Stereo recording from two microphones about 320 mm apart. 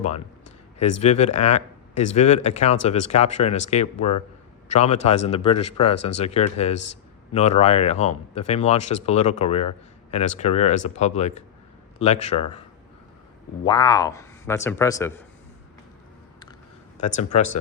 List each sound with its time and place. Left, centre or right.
0.8 s speech: centre
13.7 s speech: centre
17.3 s speech: centre